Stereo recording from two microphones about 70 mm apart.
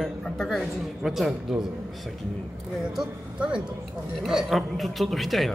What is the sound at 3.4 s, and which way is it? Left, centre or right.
A man's voice, centre.